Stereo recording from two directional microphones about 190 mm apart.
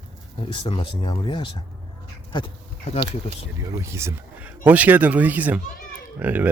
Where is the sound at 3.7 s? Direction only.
15° right (ahead or behind).